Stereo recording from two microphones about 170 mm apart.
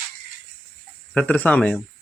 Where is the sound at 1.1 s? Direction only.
10° left (ahead or behind).